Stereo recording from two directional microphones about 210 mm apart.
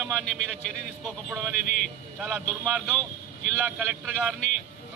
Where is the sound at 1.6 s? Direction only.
35° left (ahead or behind).